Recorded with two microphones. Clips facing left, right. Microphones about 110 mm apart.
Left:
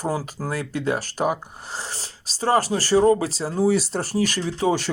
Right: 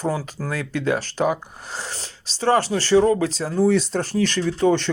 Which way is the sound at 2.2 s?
40° left (ahead or behind).